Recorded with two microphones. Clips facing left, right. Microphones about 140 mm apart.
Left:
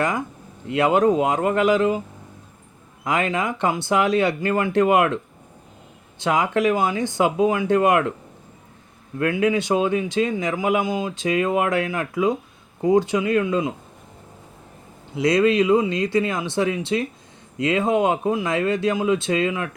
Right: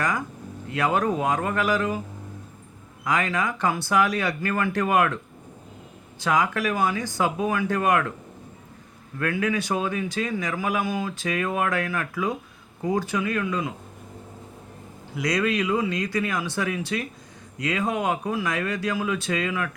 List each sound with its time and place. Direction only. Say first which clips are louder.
0.0 s speech: left 4 dB; 25° left (ahead or behind)
3.0 s speech: left 3 dB; 25° left (ahead or behind)
9.1 s speech: left 5 dB; 25° left (ahead or behind)
15.1 s speech: left 7 dB; 25° left (ahead or behind)